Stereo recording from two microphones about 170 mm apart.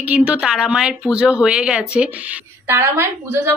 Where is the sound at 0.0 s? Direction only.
5° right (ahead or behind).